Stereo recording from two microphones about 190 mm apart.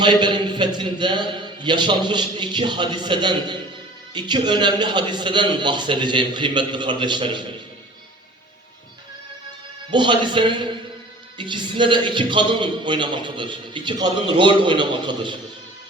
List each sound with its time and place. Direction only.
0.0 s a man's voice: 25° right (ahead or behind)
9.9 s a man's voice: 25° right (ahead or behind)